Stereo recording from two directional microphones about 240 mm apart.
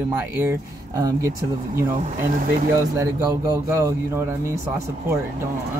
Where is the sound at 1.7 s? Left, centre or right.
Right.